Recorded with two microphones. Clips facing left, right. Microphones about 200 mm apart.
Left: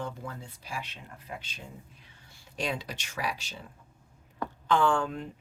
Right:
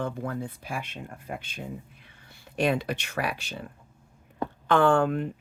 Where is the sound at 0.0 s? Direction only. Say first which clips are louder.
Right 7 dB; 60° right (ahead or behind).